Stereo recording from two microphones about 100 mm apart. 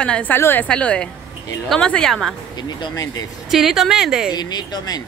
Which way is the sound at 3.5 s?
Centre (ahead or behind).